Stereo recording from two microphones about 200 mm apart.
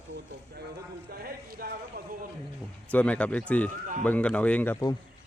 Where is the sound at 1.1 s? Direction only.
50° right (ahead or behind).